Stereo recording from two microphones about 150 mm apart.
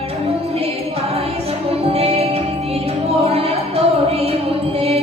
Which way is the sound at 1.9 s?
40° right (ahead or behind).